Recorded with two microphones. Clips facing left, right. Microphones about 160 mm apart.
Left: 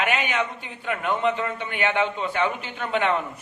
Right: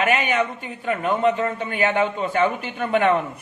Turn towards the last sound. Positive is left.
turn(degrees=-50)  # may be behind; listen again after turning